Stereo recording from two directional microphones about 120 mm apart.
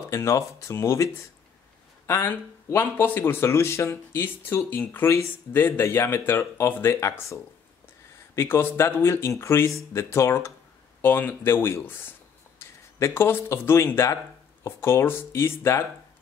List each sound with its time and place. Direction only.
0.1 s speech: 25° left (ahead or behind)
8.4 s speech: 20° left (ahead or behind)